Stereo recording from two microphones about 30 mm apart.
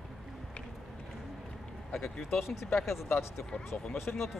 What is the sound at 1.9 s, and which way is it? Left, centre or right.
Speech, centre.